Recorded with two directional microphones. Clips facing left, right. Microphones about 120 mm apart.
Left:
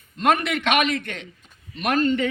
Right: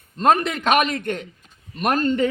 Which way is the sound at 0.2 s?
35° right (ahead or behind).